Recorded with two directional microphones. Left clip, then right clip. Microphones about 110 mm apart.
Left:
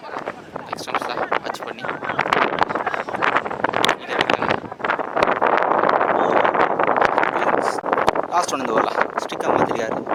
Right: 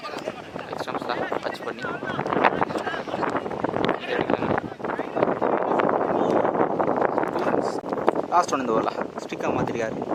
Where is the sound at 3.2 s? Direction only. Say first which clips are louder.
Left 9 dB; 25° left (ahead or behind).